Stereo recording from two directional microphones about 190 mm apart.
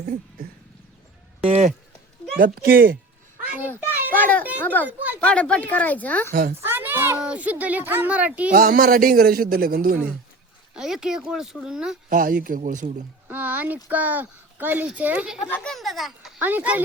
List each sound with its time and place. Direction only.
1.4 s a sound: 30° right (ahead or behind)
2.4 s a man's voice: 50° right (ahead or behind)
3.9 s children playing: 10° right (ahead or behind)
4.2 s a sound: 10° left (ahead or behind)
4.6 s speech: 10° left (ahead or behind)
4.9 s a child's voice: 10° right (ahead or behind)
5.2 s speech: 5° left (ahead or behind)
6.6 s a child's voice: 10° right (ahead or behind)
8.5 s a man's voice: 50° right (ahead or behind)
10.8 s a child's voice: centre (ahead or behind)
12.0 s a man's voice: 45° right (ahead or behind)
13.2 s a child's voice: 10° right (ahead or behind)
15.4 s a child's voice: 5° left (ahead or behind); by 16.8 s 10° right (ahead or behind)